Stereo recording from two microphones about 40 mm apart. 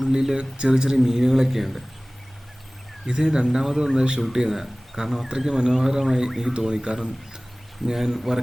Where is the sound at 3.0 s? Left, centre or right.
Centre.